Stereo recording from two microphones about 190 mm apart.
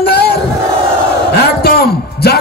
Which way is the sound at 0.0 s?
60° left (ahead or behind).